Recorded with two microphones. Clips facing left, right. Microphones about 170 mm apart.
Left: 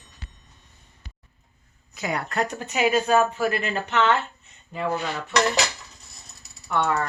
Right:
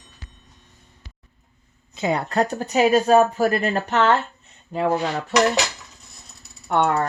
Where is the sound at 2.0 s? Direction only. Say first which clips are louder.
Right 5 dB; 25° right (ahead or behind); by 5.2 s 45° right (ahead or behind).